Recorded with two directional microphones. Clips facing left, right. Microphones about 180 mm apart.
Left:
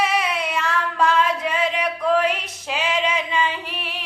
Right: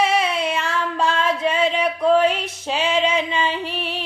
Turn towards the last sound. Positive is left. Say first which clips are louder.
# right 5 dB
turn(degrees=-30)  # may be behind; listen again after turning